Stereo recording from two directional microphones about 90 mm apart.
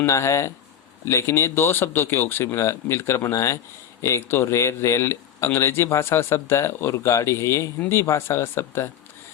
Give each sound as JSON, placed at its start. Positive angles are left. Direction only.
{"t": 0.0, "sound": "speech", "side_deg": 30}